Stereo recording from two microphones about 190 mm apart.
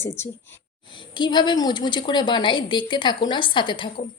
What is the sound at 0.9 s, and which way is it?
A woman's voice, 25° left (ahead or behind).